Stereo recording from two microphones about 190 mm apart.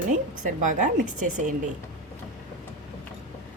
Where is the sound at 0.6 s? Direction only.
40° right (ahead or behind).